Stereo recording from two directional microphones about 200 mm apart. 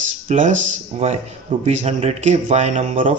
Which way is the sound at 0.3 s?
35° right (ahead or behind).